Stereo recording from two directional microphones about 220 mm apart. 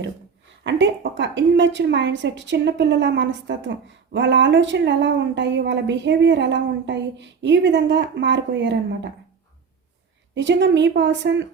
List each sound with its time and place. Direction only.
0.6 s a woman's voice: 55° right (ahead or behind)
10.3 s a woman's voice: 55° right (ahead or behind)